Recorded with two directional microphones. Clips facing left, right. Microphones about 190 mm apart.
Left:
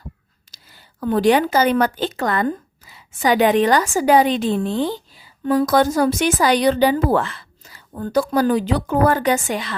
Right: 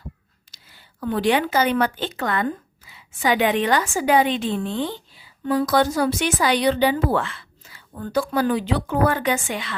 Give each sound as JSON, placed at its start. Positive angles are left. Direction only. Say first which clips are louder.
{"t": 0.5, "sound": "a woman's voice", "louder": "left 3 dB", "side_deg": 40}